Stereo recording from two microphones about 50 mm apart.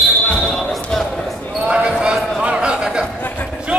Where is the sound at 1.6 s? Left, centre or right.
Right.